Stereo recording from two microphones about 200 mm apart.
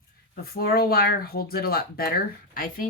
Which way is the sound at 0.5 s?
50° left (ahead or behind).